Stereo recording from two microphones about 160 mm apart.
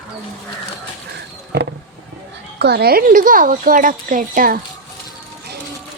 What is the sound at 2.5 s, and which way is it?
Speech, 90° right.